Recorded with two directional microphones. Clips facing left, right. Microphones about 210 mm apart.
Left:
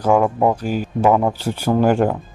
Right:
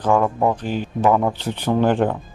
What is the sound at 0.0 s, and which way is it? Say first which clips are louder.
Speech: left 2 dB; 10° left (ahead or behind).